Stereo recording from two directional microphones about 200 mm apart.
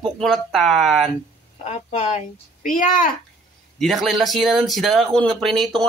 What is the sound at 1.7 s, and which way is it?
Speech, 35° left (ahead or behind).